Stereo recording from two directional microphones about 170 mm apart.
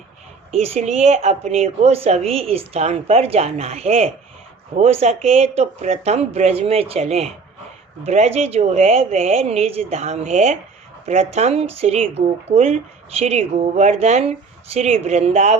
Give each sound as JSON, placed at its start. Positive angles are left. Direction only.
{"t": 0.5, "sound": "speech", "side_deg": -40}